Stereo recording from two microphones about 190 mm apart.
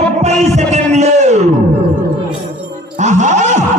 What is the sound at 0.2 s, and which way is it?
Music, 35° right (ahead or behind).